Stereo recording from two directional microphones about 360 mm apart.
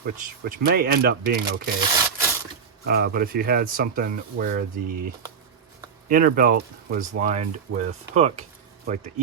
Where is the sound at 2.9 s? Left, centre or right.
Right.